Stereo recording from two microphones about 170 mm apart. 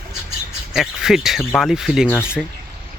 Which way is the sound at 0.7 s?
5° right (ahead or behind).